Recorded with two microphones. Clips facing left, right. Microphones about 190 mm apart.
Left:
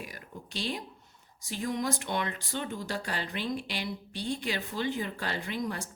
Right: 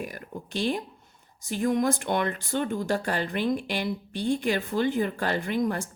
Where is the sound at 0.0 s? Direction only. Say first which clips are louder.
Right 7 dB; 50° right (ahead or behind).